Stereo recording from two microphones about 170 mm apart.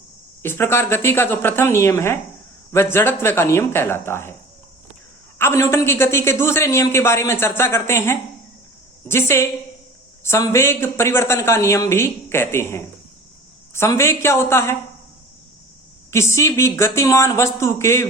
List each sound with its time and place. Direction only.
0.4 s speech: 15° left (ahead or behind)
5.4 s speech: 15° left (ahead or behind)
16.1 s speech: 15° left (ahead or behind)